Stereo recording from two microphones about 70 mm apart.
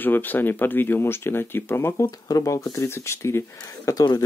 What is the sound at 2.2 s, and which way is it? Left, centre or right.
Speech, left.